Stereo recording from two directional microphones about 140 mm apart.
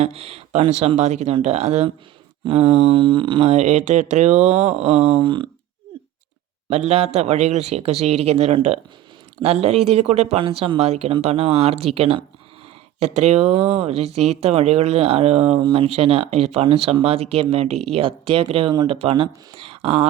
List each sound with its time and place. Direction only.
0.0 s speech: 45° right (ahead or behind)
6.7 s speech: 50° right (ahead or behind)
10.4 s speech: 40° right (ahead or behind)